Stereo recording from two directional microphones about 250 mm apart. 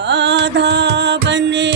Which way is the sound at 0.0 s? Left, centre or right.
Right.